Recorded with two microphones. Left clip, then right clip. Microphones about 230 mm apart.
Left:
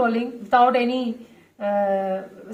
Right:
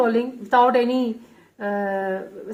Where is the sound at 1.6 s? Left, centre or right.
Right.